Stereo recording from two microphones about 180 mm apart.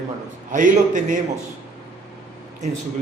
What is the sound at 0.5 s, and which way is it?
Speech, 45° right (ahead or behind).